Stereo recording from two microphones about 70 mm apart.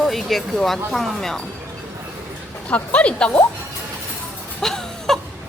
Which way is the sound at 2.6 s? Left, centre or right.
Centre.